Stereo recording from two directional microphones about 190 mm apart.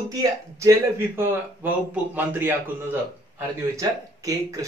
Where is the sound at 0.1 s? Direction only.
15° right (ahead or behind).